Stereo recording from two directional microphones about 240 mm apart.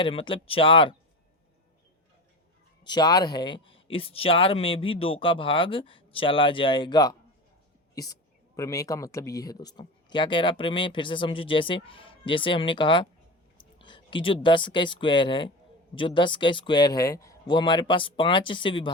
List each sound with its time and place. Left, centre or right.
0.0 s speech: left
2.8 s speech: centre